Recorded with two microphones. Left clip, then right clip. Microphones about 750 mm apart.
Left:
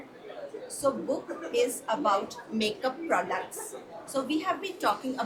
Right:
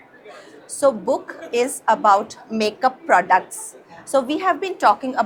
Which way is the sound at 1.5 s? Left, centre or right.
Right.